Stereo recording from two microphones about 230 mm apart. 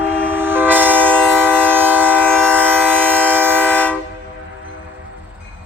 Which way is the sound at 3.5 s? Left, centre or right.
Centre.